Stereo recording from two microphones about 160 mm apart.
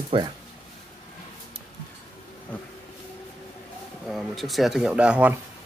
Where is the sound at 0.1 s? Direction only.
35° right (ahead or behind).